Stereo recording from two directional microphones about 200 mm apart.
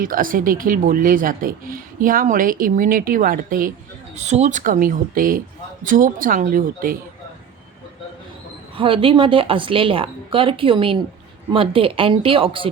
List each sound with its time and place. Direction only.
0.0 s speech: 45° right (ahead or behind)
8.7 s a woman's voice: 25° right (ahead or behind)